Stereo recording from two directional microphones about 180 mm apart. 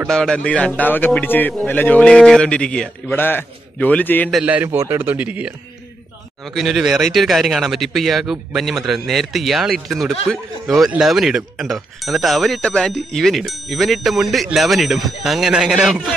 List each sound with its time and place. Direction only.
0.0 s speech: 5° left (ahead or behind)
4.3 s a man's voice: 5° right (ahead or behind)
6.5 s speech: centre (ahead or behind)